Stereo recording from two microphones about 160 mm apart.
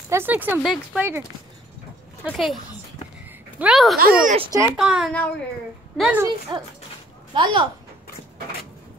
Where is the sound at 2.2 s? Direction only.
5° right (ahead or behind).